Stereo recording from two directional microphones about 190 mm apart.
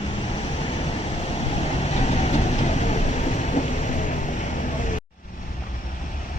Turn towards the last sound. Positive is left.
turn(degrees=40)  # may be behind; listen again after turning